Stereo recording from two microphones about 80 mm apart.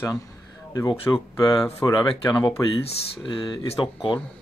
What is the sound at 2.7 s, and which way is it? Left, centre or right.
Speech, left.